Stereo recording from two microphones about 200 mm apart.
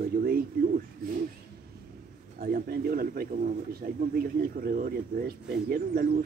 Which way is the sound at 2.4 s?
45° right (ahead or behind).